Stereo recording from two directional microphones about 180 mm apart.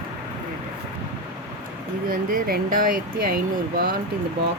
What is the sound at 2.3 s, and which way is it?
Speech, 50° right (ahead or behind).